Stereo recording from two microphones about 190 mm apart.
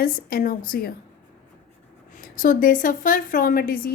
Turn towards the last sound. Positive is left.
turn(degrees=50)  # may be behind; listen again after turning